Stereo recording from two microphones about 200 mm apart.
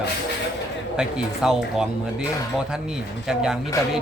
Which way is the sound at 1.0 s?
5° right (ahead or behind).